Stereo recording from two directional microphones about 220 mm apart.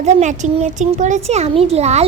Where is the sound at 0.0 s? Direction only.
30° right (ahead or behind).